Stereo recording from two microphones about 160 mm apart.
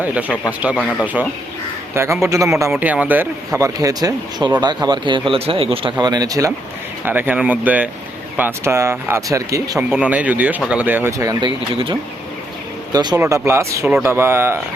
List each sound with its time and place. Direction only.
0.6 s speech: 10° right (ahead or behind)
2.2 s a man's voice: 20° right (ahead or behind)
7.0 s speech: 10° right (ahead or behind)
9.7 s speech: 10° right (ahead or behind)